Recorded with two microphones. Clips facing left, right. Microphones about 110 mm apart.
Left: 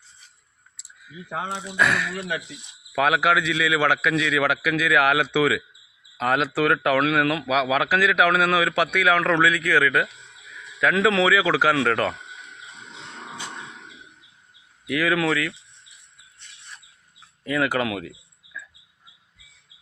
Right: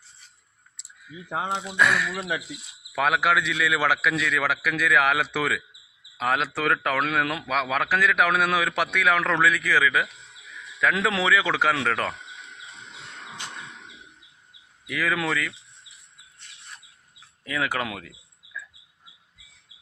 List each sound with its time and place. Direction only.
0.8 s clicking: centre (ahead or behind)
1.3 s speech: 15° right (ahead or behind)
1.7 s a man's voice: centre (ahead or behind)
13.3 s livestock: 15° left (ahead or behind)
14.8 s a man's voice: centre (ahead or behind)
17.4 s a man's voice: centre (ahead or behind)